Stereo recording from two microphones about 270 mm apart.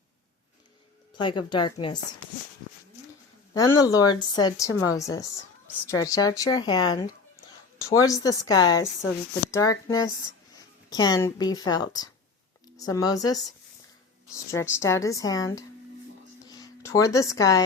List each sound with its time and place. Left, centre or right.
1.1 s a woman's voice: centre
3.5 s a woman's voice: centre
16.4 s a sound: centre